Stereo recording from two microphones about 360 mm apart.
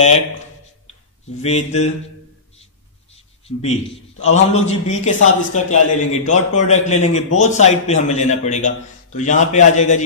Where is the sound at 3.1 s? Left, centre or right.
Centre.